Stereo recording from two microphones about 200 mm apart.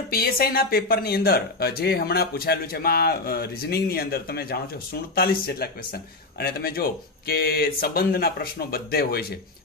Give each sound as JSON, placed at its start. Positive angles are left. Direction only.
{"t": 0.1, "sound": "speech", "side_deg": 50}